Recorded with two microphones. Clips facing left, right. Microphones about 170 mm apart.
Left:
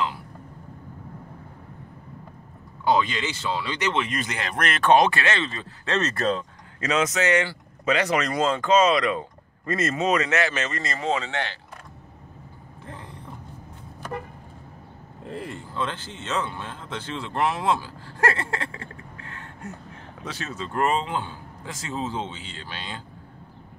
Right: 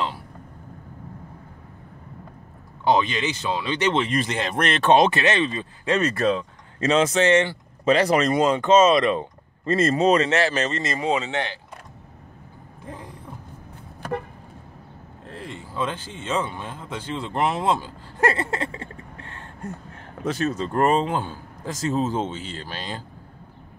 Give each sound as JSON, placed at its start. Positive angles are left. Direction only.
{"t": 2.8, "sound": "speech", "side_deg": -20}
{"t": 6.8, "sound": "speech", "side_deg": -30}
{"t": 10.8, "sound": "speech", "side_deg": -20}
{"t": 12.8, "sound": "creak", "side_deg": -10}
{"t": 15.2, "sound": "speech", "side_deg": 5}
{"t": 15.7, "sound": "speech", "side_deg": -10}
{"t": 20.2, "sound": "speech", "side_deg": -45}